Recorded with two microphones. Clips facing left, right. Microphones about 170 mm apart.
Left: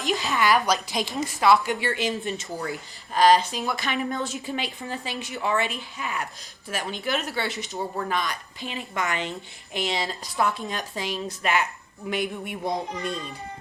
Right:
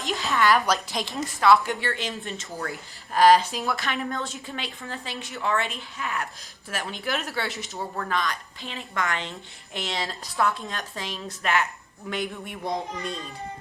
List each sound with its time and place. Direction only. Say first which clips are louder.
0.0 s a woman's voice: even; centre (ahead or behind)
7.9 s a woman's voice: right 1 dB; 15° left (ahead or behind)
10.3 s a woman's voice: even; 15° left (ahead or behind)